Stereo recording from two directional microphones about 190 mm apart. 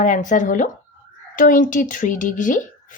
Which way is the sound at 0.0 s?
40° left (ahead or behind).